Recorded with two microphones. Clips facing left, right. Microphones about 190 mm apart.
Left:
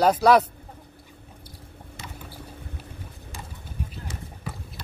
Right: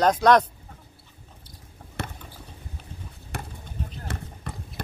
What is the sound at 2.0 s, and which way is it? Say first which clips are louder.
Rodents: right 9 dB; 65° right (ahead or behind).